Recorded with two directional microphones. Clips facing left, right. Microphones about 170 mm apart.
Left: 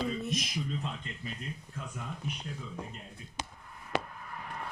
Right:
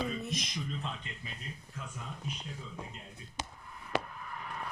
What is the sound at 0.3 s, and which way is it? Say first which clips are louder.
Speech: left 4 dB; centre (ahead or behind).